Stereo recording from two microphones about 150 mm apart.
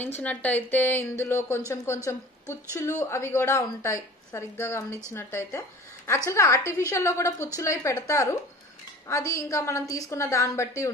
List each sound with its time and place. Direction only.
0.2 s a woman's voice: 10° left (ahead or behind)
2.7 s a woman's voice: 20° left (ahead or behind)